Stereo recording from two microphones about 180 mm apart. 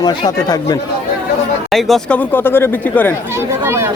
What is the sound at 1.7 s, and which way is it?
Speech, centre (ahead or behind).